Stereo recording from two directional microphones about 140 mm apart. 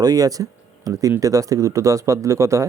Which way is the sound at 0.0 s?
25° right (ahead or behind).